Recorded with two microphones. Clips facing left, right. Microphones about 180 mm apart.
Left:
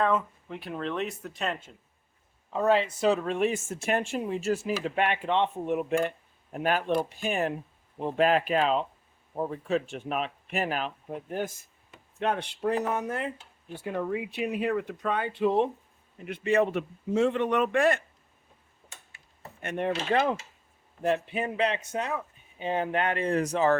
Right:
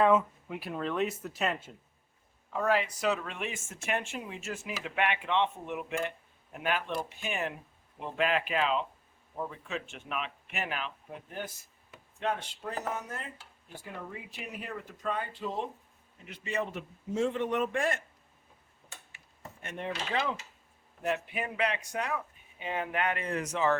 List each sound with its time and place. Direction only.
0.0 s speech: 10° right (ahead or behind)
2.5 s speech: 25° left (ahead or behind); by 11.5 s 45° left (ahead or behind)
12.2 s a man's voice: 70° left (ahead or behind)
19.6 s speech: 60° left (ahead or behind)
21.0 s speech: 30° left (ahead or behind)